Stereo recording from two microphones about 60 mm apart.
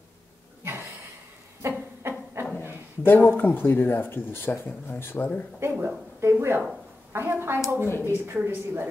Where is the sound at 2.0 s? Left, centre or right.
Right.